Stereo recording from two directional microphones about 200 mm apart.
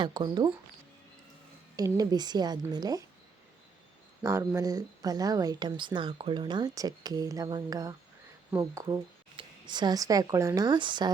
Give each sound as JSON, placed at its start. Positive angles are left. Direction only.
{"t": 0.0, "sound": "speech", "side_deg": -20}
{"t": 1.7, "sound": "speech", "side_deg": -20}
{"t": 4.2, "sound": "speech", "side_deg": -15}